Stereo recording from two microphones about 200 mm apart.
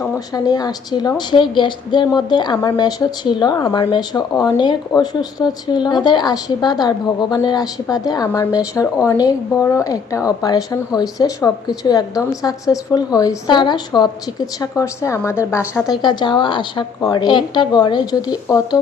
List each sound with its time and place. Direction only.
0.0 s a woman's voice: 20° left (ahead or behind)
16.0 s a woman's voice: 20° left (ahead or behind)